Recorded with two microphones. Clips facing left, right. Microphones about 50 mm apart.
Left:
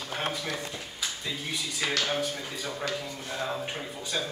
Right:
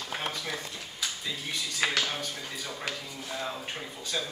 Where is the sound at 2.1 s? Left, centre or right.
Centre.